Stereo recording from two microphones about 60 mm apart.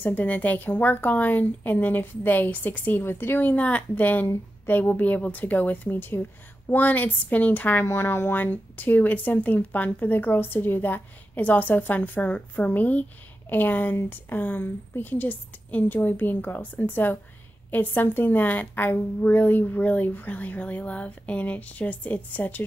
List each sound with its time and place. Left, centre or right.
0.0 s a woman's voice: left